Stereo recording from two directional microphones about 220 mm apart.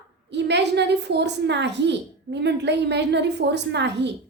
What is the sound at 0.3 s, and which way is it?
A woman's voice, 50° right (ahead or behind).